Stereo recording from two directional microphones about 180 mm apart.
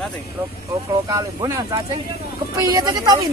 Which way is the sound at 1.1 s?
20° right (ahead or behind).